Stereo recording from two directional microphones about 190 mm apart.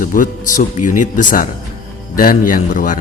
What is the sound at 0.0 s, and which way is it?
A man's voice, 45° left (ahead or behind).